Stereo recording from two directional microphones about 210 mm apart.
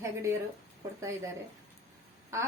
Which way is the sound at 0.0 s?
15° right (ahead or behind).